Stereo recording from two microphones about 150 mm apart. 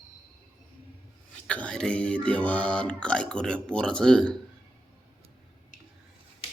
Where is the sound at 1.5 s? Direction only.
5° left (ahead or behind).